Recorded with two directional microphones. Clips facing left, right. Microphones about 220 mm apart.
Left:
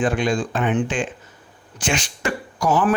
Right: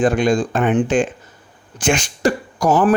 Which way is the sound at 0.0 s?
45° right (ahead or behind).